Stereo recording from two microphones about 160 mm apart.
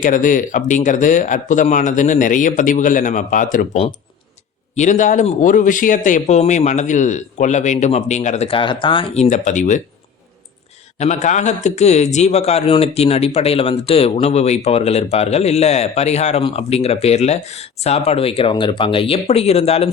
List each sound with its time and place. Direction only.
0.0 s a man's voice: 55° left (ahead or behind)
4.7 s a man's voice: 50° left (ahead or behind)
9.3 s a man's voice: 50° left (ahead or behind)
10.9 s a man's voice: 45° left (ahead or behind)